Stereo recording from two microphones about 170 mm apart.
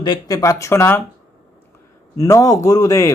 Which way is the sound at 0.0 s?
25° left (ahead or behind).